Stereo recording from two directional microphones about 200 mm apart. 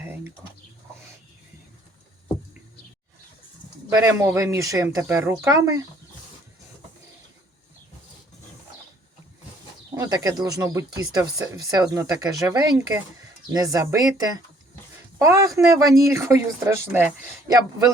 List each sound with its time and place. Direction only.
0.0 s pigeon: 10° right (ahead or behind)
3.8 s speech: 10° right (ahead or behind)
9.9 s speech: 15° right (ahead or behind)